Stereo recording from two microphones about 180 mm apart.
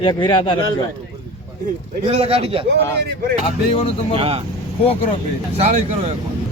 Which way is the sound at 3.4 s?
30° left (ahead or behind).